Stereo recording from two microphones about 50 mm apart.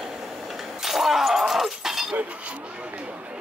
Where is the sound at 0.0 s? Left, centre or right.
Centre.